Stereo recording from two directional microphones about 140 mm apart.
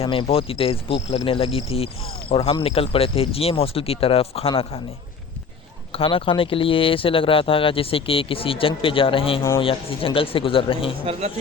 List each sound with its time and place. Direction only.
0.0 s speech: 40° left (ahead or behind)
5.9 s speech: 40° left (ahead or behind)
11.0 s speech: 45° right (ahead or behind)